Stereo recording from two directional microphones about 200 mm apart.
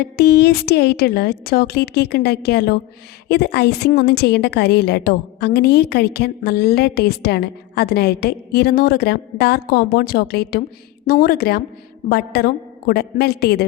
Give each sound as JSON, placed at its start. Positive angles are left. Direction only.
{"t": 0.0, "sound": "a woman's voice", "side_deg": 55}